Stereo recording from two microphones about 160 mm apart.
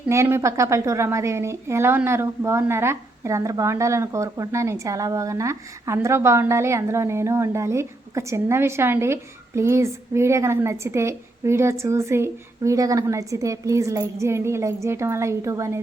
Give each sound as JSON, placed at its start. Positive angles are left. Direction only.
{"t": 0.1, "sound": "a woman's voice", "side_deg": -15}